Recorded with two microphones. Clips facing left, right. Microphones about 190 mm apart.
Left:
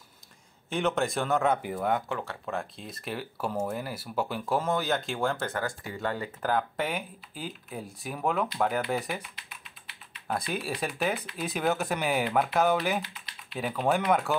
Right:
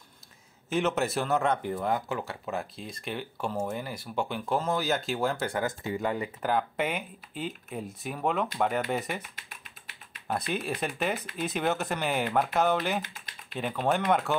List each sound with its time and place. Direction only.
0.7 s speech: 5° right (ahead or behind); by 6.0 s 20° right (ahead or behind)
6.0 s speech: 5° right (ahead or behind)
9.3 s typing: 45° right (ahead or behind)
10.2 s speech: centre (ahead or behind)
13.0 s typing: 50° right (ahead or behind)
13.6 s speech: 5° left (ahead or behind)